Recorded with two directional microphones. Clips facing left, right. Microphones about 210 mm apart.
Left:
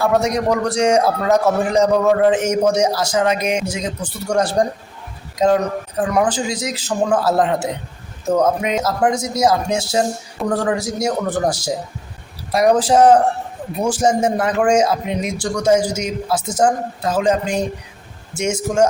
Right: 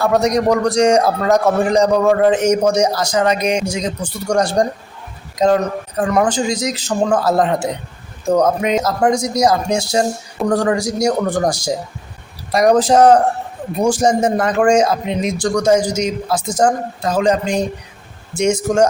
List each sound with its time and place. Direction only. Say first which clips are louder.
0.0 s a man's voice: right 2 dB; 5° left (ahead or behind)